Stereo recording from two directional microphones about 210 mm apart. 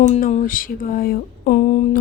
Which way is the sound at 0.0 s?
35° left (ahead or behind).